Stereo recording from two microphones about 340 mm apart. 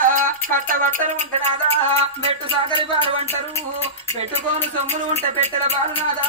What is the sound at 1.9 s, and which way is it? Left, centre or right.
Music, centre.